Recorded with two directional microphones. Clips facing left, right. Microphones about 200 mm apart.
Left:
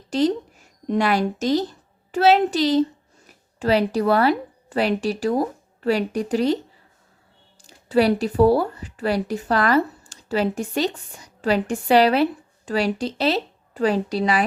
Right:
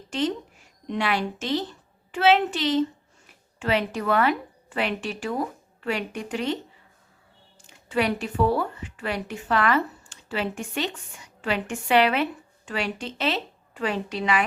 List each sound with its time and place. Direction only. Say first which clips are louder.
0.1 s a woman's voice: left 6 dB; 35° left (ahead or behind)
7.6 s speech: left 7 dB; 35° left (ahead or behind)